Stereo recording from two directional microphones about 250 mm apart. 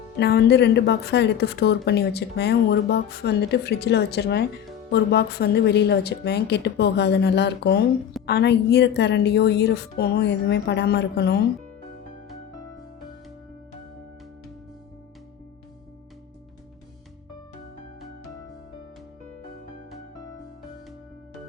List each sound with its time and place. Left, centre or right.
0.2 s speech: left